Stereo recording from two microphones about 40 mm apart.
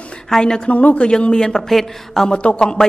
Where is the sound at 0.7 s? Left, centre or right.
Left; by 1.6 s centre.